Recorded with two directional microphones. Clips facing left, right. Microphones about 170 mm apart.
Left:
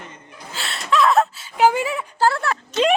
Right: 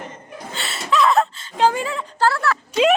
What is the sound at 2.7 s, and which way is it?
Speech, 5° right (ahead or behind).